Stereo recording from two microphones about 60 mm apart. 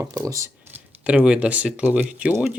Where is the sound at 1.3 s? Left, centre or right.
Right.